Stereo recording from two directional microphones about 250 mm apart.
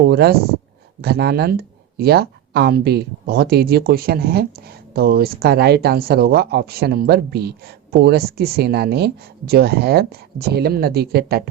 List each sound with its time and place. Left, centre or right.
0.1 s speech: right